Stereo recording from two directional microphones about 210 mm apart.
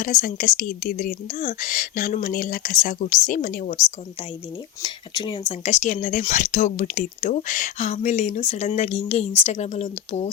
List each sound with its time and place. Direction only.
0.0 s speech: 40° left (ahead or behind)
4.8 s speech: 20° left (ahead or behind)